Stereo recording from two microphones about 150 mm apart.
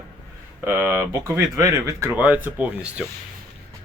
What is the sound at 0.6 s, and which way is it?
Speech, 15° right (ahead or behind).